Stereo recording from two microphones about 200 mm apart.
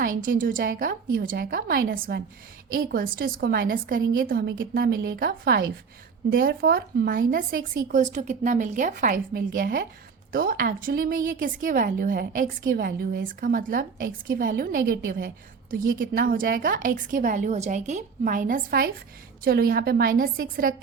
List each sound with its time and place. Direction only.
0.0 s a woman's voice: 45° right (ahead or behind)